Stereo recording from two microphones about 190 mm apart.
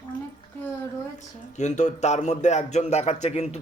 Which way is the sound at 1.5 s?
40° left (ahead or behind).